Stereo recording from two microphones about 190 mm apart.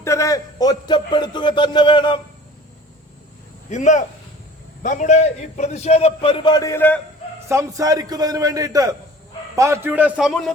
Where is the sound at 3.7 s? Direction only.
40° left (ahead or behind); by 7.0 s 10° left (ahead or behind).